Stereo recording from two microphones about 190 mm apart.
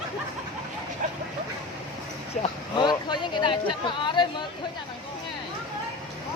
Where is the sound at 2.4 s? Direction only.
25° left (ahead or behind).